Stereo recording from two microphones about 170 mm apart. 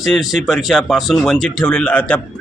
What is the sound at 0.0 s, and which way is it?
A man's voice, centre (ahead or behind).